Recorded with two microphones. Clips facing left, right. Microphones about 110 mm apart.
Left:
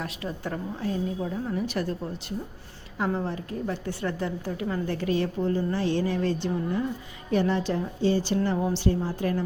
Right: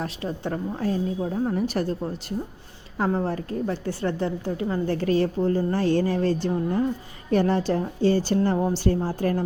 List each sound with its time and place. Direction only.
0.0 s a woman's voice: 30° right (ahead or behind)
0.8 s a woman's voice: 40° right (ahead or behind)
3.0 s a woman's voice: 35° right (ahead or behind)
8.5 s a woman's voice: 30° right (ahead or behind)